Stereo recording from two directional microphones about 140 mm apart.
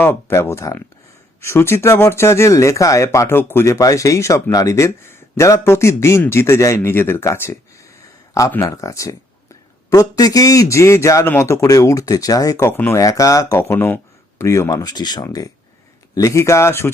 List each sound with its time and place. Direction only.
0.0 s speech: 15° left (ahead or behind)